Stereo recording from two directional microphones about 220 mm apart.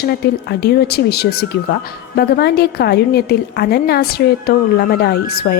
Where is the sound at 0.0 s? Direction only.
45° left (ahead or behind).